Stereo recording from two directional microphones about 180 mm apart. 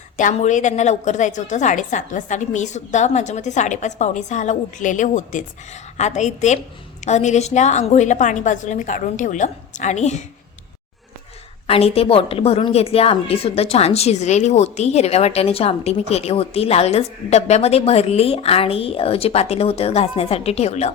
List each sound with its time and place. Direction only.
0.2 s a woman's voice: 45° left (ahead or behind)
11.6 s a woman's voice: 35° left (ahead or behind)